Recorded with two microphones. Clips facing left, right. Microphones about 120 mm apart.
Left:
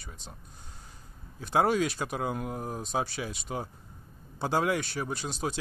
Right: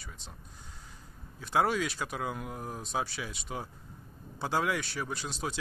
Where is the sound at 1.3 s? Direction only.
40° left (ahead or behind).